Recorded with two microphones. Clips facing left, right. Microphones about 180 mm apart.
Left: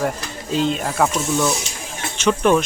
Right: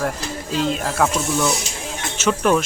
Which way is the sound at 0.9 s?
10° left (ahead or behind).